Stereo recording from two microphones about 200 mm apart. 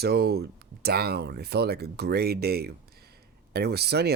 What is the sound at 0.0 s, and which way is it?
Speech, 55° right (ahead or behind).